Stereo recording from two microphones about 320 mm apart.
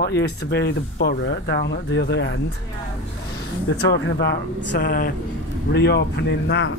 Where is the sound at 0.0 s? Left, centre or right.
Left.